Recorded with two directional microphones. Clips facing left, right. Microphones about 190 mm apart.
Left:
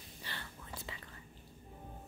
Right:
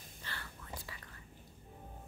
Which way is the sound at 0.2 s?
20° left (ahead or behind).